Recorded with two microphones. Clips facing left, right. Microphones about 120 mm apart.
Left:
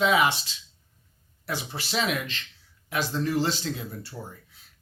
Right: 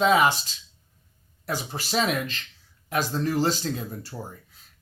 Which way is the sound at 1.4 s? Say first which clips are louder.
Right 2 dB; 40° right (ahead or behind).